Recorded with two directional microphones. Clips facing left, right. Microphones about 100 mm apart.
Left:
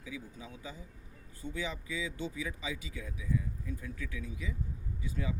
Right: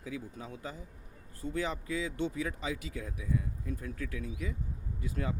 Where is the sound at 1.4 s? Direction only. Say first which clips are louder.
Right 5 dB; 35° right (ahead or behind).